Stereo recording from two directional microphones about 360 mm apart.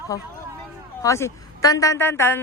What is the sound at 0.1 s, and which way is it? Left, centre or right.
A woman's voice, centre.